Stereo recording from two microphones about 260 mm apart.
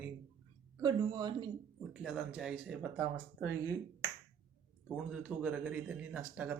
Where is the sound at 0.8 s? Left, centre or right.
Centre.